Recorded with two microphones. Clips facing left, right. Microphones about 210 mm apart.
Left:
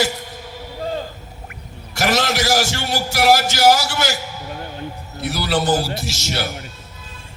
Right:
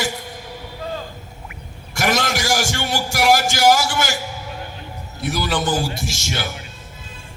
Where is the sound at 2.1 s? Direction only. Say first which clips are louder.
Left 3 dB; 45° right (ahead or behind).